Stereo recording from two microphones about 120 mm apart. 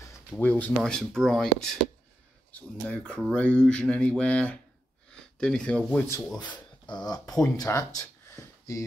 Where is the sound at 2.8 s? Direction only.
10° left (ahead or behind).